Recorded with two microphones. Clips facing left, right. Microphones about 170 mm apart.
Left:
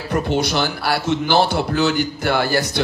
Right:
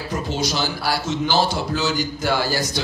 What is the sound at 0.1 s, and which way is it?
A man's voice, 60° left (ahead or behind).